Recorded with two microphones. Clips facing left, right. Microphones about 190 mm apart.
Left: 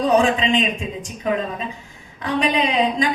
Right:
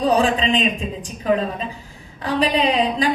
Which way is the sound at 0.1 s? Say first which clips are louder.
Left 2 dB; 35° right (ahead or behind).